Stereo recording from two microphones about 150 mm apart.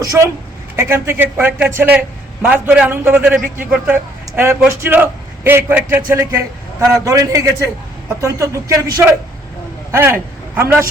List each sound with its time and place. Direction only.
0.0 s a man's voice: 20° right (ahead or behind)